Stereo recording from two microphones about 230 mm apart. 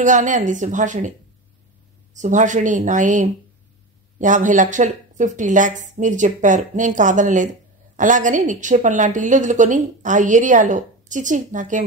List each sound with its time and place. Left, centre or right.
0.0 s a woman's voice: right
2.1 s a woman's voice: right